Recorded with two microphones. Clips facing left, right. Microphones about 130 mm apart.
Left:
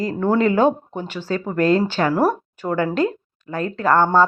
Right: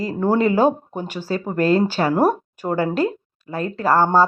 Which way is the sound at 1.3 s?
35° right (ahead or behind).